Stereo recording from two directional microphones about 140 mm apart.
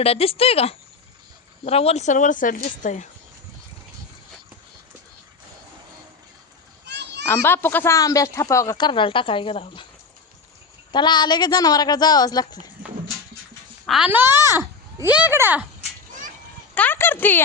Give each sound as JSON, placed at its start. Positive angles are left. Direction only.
{"t": 0.0, "sound": "a woman's voice", "side_deg": 45}
{"t": 7.3, "sound": "a child's voice", "side_deg": 15}
{"t": 10.9, "sound": "speech", "side_deg": 35}
{"t": 13.8, "sound": "speech", "side_deg": 0}
{"t": 14.1, "sound": "a child's voice", "side_deg": -15}
{"t": 16.7, "sound": "speech", "side_deg": 15}